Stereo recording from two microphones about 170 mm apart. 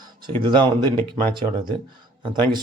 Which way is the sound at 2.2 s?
25° right (ahead or behind).